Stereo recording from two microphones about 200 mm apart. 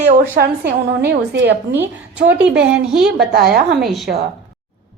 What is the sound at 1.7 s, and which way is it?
A woman's voice, 10° right (ahead or behind).